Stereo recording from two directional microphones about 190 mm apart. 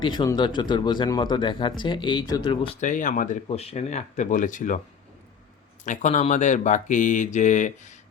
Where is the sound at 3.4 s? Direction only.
30° left (ahead or behind).